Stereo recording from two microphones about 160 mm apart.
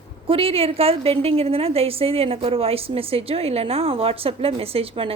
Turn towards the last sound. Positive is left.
turn(degrees=-35)  # may be behind; listen again after turning